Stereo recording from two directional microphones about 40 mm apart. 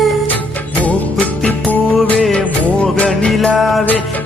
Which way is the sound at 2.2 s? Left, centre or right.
Left.